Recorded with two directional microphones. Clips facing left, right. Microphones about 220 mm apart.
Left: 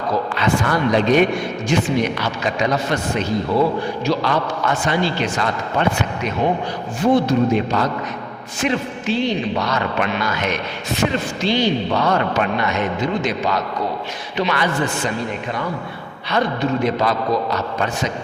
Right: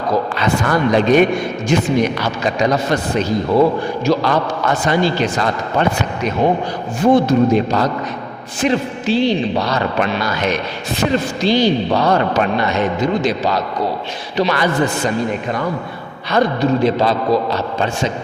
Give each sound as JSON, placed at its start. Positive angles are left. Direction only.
{"t": 0.1, "sound": "a man's voice", "side_deg": -40}
{"t": 16.3, "sound": "a man's voice", "side_deg": -40}